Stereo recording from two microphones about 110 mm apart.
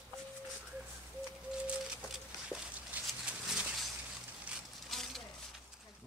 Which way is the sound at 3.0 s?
Centre (ahead or behind).